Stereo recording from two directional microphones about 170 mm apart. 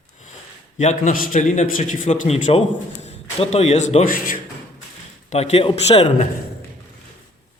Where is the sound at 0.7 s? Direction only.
45° left (ahead or behind).